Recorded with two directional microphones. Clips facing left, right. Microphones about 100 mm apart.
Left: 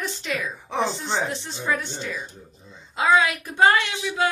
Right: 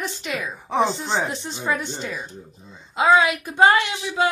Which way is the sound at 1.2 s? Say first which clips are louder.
Right 1 dB; 20° right (ahead or behind).